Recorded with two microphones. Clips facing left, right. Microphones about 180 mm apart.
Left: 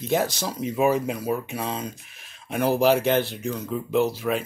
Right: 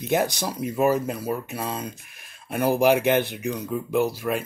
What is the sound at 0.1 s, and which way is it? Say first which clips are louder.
Speech: right 1 dB; 15° right (ahead or behind).